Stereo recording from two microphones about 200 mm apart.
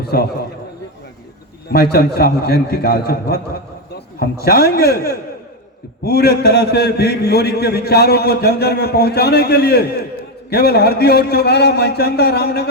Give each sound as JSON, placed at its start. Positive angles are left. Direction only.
{"t": 0.0, "sound": "a man's voice", "side_deg": 50}
{"t": 1.7, "sound": "a man's voice", "side_deg": 50}